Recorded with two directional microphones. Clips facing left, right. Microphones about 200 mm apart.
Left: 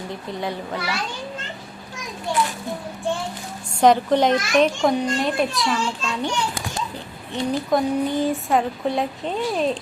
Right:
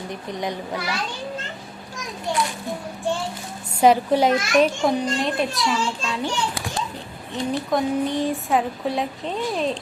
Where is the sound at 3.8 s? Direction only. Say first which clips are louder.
Even; 10° right (ahead or behind).